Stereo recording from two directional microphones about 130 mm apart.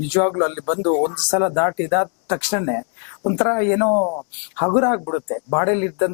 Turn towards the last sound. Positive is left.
turn(degrees=15)  # may be behind; listen again after turning